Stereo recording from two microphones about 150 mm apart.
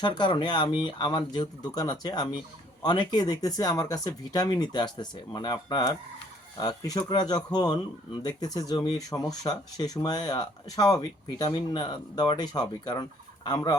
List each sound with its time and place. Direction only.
0.0 s speech: 30° left (ahead or behind)